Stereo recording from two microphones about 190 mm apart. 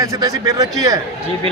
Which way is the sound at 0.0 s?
15° right (ahead or behind).